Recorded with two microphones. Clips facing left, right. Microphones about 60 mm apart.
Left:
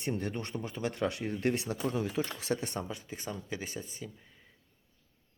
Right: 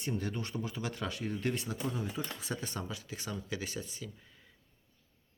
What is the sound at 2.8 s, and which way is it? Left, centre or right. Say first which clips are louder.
Speech: left 2 dB; left.